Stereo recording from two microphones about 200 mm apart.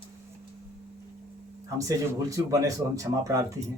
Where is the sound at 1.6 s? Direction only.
15° right (ahead or behind).